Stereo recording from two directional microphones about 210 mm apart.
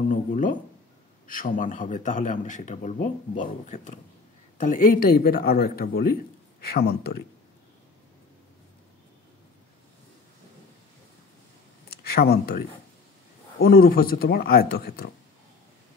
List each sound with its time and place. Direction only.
0.1 s a man's voice: 40° left (ahead or behind)
11.9 s speech: 50° left (ahead or behind)
13.7 s speech: 45° left (ahead or behind)